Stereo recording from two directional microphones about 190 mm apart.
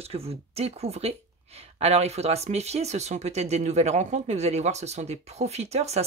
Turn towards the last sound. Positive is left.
turn(degrees=-35)  # may be behind; listen again after turning